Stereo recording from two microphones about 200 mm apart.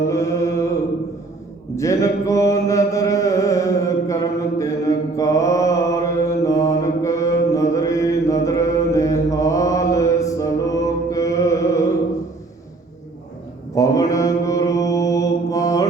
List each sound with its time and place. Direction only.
0.1 s mantra: 15° left (ahead or behind)
13.7 s mantra: 15° left (ahead or behind)